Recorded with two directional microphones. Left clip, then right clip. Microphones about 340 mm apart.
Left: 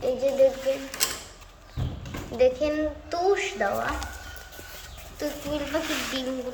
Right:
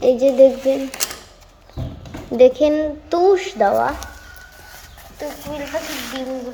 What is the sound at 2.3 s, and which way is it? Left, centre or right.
A woman's voice, right.